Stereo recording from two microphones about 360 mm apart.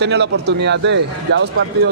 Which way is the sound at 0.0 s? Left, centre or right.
Right.